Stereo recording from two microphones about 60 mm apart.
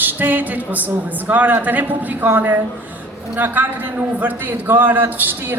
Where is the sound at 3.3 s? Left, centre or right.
Right.